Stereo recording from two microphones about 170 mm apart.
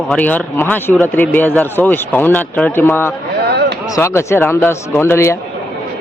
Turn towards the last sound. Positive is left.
turn(degrees=15)  # may be behind; listen again after turning